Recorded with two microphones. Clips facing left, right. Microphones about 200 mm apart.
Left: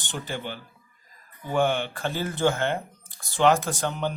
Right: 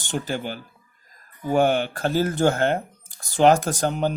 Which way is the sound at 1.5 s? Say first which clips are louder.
Right 4 dB; 40° right (ahead or behind).